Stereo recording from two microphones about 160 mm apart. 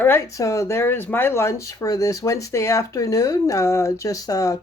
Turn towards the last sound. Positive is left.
turn(degrees=20)  # may be behind; listen again after turning